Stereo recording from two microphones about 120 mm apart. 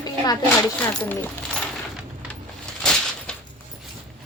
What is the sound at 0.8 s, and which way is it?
Speech, 10° left (ahead or behind).